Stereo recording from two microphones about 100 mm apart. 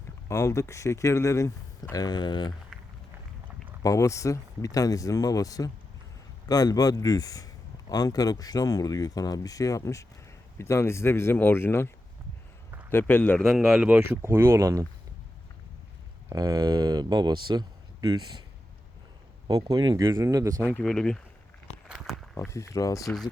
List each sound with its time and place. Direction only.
0.3 s a man's voice: 30° left (ahead or behind); by 2.6 s 50° left (ahead or behind)
3.8 s a man's voice: 30° left (ahead or behind)
12.9 s speech: 20° left (ahead or behind)
13.4 s speech: 5° right (ahead or behind)
14.0 s speech: 20° right (ahead or behind)
16.3 s speech: 35° right (ahead or behind)
19.5 s speech: 40° right (ahead or behind)
20.2 s speech: 30° right (ahead or behind)
20.7 s speech: 10° left (ahead or behind)
21.8 s a sound: 5° right (ahead or behind)
22.4 s a man's voice: 30° left (ahead or behind)